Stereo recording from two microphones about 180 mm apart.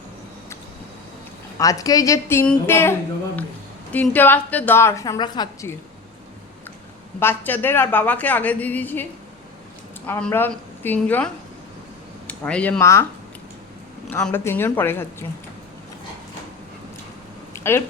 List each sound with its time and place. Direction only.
1.5 s a woman's voice: 20° left (ahead or behind)
3.9 s a woman's voice: 10° left (ahead or behind)
7.2 s a woman's voice: 10° left (ahead or behind)
10.1 s a woman's voice: 10° left (ahead or behind)
12.3 s a woman's voice: 5° left (ahead or behind)
14.1 s a woman's voice: 10° left (ahead or behind)
17.5 s a sound: 15° left (ahead or behind)